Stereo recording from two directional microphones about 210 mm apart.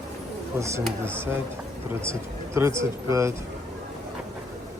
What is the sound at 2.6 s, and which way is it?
Speech, 15° right (ahead or behind).